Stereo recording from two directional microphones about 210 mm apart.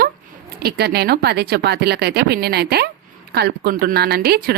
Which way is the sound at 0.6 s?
50° right (ahead or behind).